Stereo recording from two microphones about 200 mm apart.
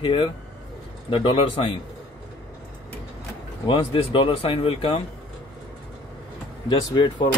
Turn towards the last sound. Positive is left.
turn(degrees=20)  # may be behind; listen again after turning